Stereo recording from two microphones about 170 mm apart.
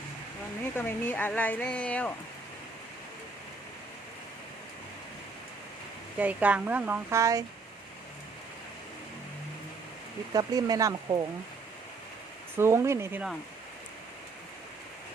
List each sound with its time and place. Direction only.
0.8 s speech: 10° left (ahead or behind)
6.1 s speech: 10° right (ahead or behind)
10.3 s speech: 20° right (ahead or behind)
12.5 s speech: 15° right (ahead or behind)